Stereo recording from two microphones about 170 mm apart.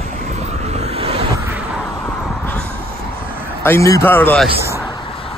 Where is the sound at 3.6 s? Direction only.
15° left (ahead or behind).